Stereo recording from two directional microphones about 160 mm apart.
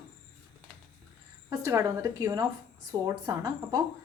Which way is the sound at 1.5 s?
20° right (ahead or behind).